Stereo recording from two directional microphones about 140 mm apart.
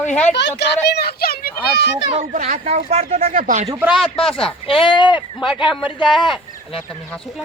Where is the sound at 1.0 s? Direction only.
90° left.